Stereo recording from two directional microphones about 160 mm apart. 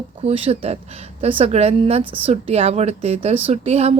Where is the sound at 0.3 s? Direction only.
35° right (ahead or behind).